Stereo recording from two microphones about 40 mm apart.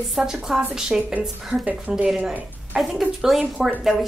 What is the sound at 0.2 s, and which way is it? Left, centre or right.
A woman's voice, centre.